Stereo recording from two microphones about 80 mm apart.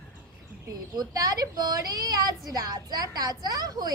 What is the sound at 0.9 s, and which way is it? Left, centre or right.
A woman's voice, right.